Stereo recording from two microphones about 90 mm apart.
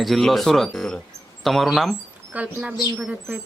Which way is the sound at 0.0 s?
Centre (ahead or behind).